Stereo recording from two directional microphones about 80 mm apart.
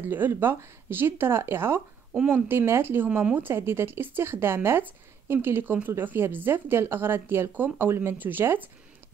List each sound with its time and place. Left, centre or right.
0.0 s speech: right